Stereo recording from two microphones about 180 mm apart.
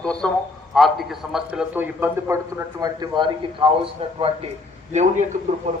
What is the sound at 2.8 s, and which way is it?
A man's voice, 25° right (ahead or behind).